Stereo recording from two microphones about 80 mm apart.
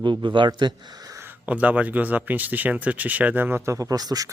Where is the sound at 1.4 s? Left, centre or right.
Centre.